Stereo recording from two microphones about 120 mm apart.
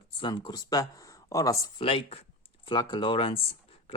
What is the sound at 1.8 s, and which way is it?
Speech, 50° left (ahead or behind).